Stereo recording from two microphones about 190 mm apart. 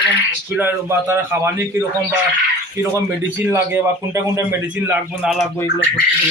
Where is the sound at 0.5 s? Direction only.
10° right (ahead or behind).